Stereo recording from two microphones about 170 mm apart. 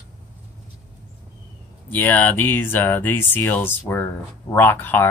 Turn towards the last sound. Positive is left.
turn(degrees=10)  # may be behind; listen again after turning